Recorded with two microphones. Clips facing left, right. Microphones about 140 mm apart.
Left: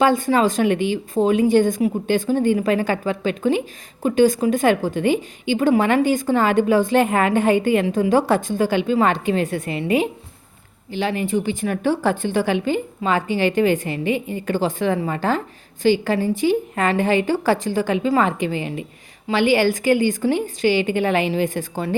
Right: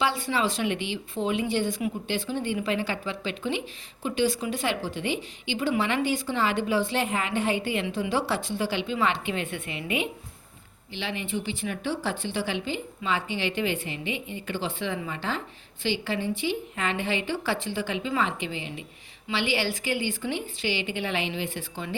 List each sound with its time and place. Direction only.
0.0 s a woman's voice: 45° left (ahead or behind)